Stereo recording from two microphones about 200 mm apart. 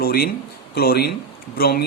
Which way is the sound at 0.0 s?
50° left (ahead or behind).